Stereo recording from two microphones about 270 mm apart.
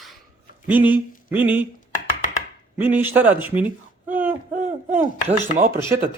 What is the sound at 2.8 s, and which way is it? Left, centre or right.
Speech, centre.